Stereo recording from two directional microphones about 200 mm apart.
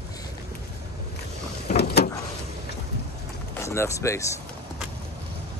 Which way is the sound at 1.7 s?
55° left (ahead or behind).